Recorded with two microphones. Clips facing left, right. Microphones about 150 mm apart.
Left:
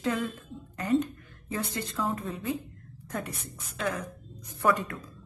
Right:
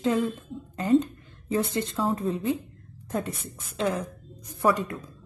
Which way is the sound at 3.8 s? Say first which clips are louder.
Right 5 dB; 25° right (ahead or behind).